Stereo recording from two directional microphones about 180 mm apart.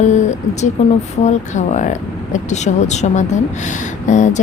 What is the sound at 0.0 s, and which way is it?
A woman's voice, 40° left (ahead or behind).